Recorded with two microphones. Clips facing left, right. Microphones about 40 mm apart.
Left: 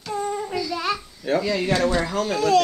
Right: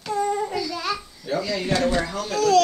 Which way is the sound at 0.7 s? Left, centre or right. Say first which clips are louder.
Left 2 dB; centre.